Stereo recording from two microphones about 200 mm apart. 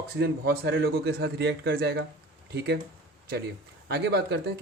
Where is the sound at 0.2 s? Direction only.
55° right (ahead or behind).